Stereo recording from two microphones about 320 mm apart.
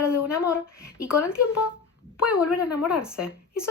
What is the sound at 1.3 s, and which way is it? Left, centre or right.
Speech, centre.